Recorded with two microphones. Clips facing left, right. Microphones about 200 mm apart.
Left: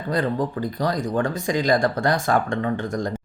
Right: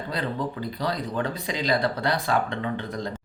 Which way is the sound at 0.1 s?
45° left (ahead or behind).